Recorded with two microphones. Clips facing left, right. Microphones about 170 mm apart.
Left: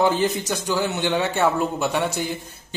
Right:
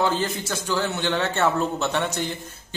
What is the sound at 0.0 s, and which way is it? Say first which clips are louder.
Speech: left 4 dB; 15° left (ahead or behind).